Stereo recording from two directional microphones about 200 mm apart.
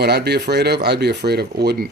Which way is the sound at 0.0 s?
55° right (ahead or behind).